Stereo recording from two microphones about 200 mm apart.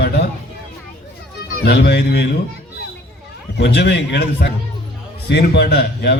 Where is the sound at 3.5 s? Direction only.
60° left (ahead or behind).